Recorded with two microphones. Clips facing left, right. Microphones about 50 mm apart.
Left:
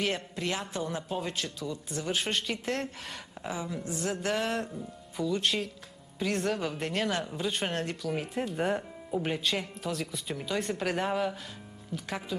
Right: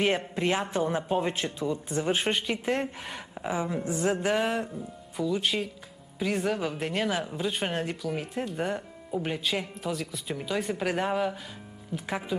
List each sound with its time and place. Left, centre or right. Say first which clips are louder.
0.0 s speech: right 5 dB; right
2.3 s speech: right 3 dB; centre
3.5 s speech: right 6 dB; right
4.5 s speech: right 2 dB; centre
11.9 s speech: right 4 dB; centre